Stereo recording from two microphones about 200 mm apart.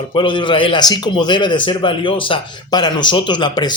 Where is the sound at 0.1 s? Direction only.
25° left (ahead or behind).